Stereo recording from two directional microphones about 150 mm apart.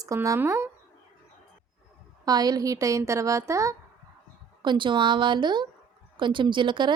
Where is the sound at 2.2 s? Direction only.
25° right (ahead or behind).